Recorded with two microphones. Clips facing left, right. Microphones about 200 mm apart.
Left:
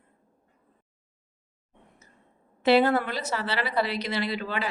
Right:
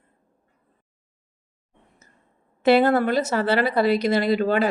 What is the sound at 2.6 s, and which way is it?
Speech, 50° right (ahead or behind).